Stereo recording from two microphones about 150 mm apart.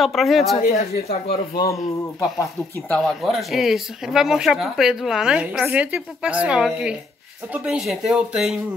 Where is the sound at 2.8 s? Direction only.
5° left (ahead or behind).